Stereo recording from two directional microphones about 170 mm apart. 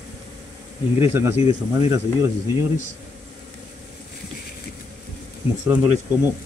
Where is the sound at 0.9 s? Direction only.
15° right (ahead or behind).